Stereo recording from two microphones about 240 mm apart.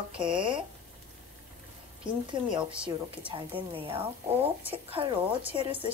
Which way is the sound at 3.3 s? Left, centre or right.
Right.